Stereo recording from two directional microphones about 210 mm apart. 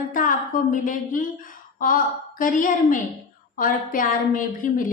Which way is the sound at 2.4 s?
40° left (ahead or behind).